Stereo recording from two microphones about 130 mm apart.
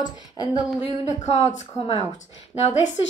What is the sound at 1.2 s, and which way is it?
Speech, 60° left (ahead or behind).